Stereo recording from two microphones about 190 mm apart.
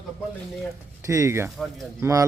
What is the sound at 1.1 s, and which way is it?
Speech, 15° right (ahead or behind).